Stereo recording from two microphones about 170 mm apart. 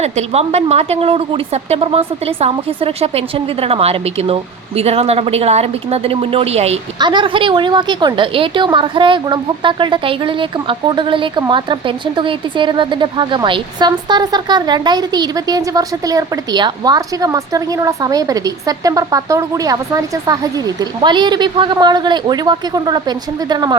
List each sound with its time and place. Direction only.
0.0 s speech: 40° right (ahead or behind)
7.0 s a woman's voice: 25° right (ahead or behind)